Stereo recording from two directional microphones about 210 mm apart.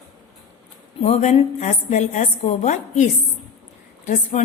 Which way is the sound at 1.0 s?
30° left (ahead or behind).